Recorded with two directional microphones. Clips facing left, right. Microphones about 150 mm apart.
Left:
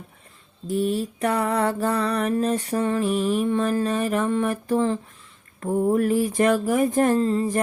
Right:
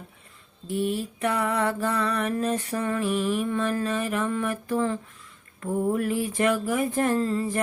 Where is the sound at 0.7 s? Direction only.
40° left (ahead or behind).